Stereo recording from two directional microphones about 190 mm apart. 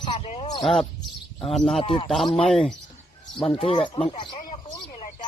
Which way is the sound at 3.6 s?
30° left (ahead or behind).